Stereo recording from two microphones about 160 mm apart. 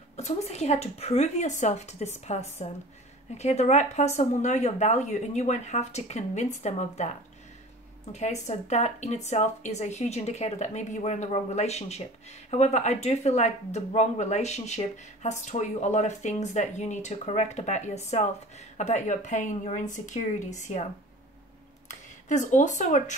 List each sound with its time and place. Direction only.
0.1 s speech: 45° left (ahead or behind)
8.1 s speech: 45° left (ahead or behind)
22.3 s speech: 50° left (ahead or behind)